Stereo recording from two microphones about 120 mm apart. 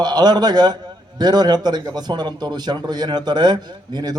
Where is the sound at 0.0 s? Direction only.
35° right (ahead or behind).